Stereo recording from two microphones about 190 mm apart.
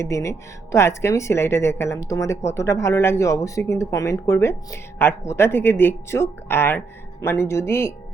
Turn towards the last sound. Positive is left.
turn(degrees=15)  # may be behind; listen again after turning